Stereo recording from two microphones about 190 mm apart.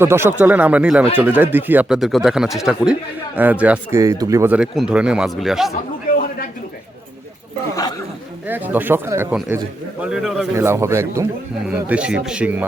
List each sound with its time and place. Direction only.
0.0 s speech: 10° right (ahead or behind)
6.1 s a sound: 50° left (ahead or behind)
8.4 s speech: 10° right (ahead or behind)
10.5 s speech: 15° right (ahead or behind)